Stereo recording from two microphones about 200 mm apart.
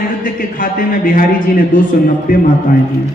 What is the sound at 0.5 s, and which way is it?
A man's voice, 45° left (ahead or behind).